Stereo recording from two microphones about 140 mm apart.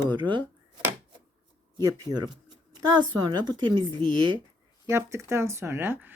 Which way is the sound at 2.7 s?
30° right (ahead or behind).